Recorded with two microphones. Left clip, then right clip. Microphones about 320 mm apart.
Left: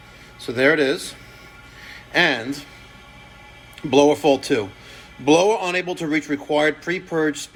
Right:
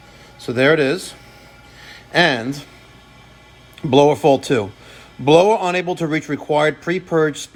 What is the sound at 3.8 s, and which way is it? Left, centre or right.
Speech, right.